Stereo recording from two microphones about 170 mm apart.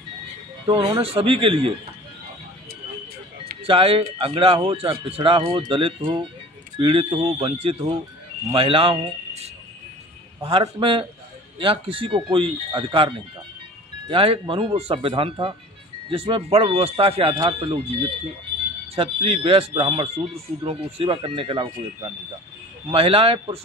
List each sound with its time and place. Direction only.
0.7 s speech: 30° right (ahead or behind)
3.6 s speech: 30° right (ahead or behind)